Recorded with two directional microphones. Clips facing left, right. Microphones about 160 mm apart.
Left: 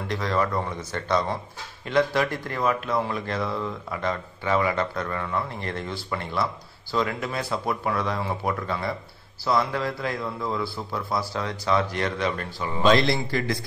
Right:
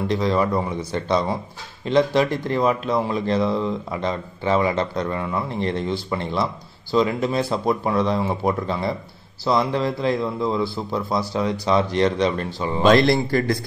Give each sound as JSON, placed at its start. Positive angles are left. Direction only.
{"t": 0.1, "sound": "a man's voice", "side_deg": -15}
{"t": 12.8, "sound": "a man's voice", "side_deg": -50}